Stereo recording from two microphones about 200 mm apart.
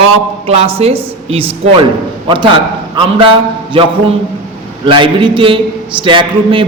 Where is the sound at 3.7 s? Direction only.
25° right (ahead or behind).